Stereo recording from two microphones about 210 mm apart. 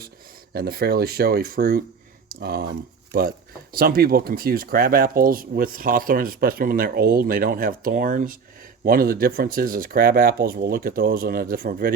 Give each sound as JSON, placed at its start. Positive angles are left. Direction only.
{"t": 0.5, "sound": "speech", "side_deg": -45}